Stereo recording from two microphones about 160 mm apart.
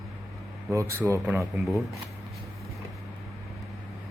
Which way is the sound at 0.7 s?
20° right (ahead or behind).